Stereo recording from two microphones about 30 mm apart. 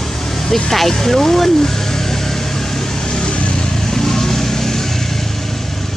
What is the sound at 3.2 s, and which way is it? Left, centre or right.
Vehicle, left.